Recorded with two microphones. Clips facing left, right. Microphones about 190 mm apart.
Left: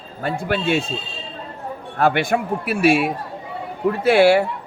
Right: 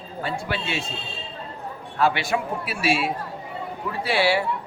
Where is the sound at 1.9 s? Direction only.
55° left (ahead or behind).